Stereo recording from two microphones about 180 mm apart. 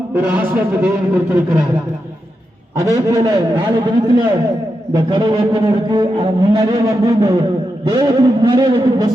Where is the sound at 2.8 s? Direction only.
20° right (ahead or behind).